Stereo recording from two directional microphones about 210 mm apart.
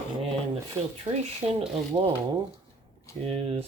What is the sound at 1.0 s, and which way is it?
Speech, 25° right (ahead or behind).